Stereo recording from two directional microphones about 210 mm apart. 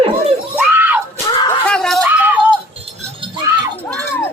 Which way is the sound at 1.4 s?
5° left (ahead or behind).